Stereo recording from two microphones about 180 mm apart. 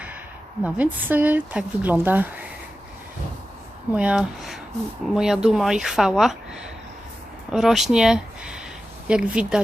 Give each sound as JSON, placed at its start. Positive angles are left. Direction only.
{"t": 0.6, "sound": "speech", "side_deg": -10}
{"t": 3.9, "sound": "speech", "side_deg": -5}